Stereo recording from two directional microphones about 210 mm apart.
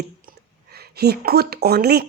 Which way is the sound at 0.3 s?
50° right (ahead or behind).